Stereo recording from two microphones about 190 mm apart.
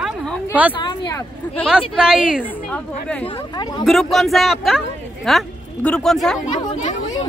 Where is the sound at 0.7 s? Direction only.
20° left (ahead or behind).